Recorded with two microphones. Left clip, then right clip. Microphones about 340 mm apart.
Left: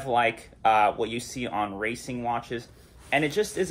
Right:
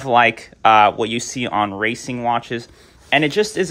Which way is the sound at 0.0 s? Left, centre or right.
Right.